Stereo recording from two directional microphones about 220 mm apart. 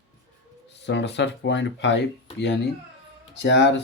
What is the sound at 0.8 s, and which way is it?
Speech, 55° left (ahead or behind).